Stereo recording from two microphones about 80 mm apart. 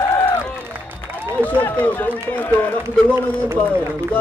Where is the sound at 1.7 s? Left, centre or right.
Left.